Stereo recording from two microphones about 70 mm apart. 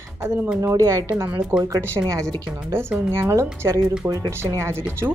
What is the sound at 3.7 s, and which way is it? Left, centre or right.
Speech, right.